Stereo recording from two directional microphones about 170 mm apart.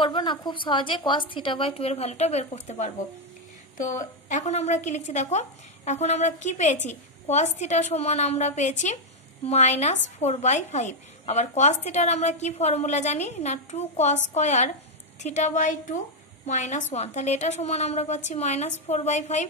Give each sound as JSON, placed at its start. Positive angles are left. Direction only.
{"t": 0.0, "sound": "a woman's voice", "side_deg": 30}